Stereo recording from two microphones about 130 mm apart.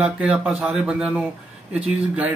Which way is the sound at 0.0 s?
5° right (ahead or behind).